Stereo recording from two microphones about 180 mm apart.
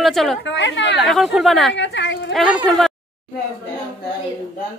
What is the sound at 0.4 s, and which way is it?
Speech, 90° left.